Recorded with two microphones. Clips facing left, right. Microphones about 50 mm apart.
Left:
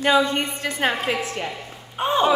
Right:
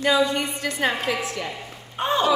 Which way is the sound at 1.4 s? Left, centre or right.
Centre.